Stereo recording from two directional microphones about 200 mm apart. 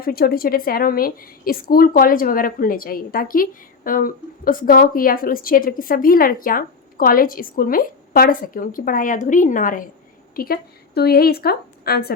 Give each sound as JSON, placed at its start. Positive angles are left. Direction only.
{"t": 0.0, "sound": "a woman's voice", "side_deg": 50}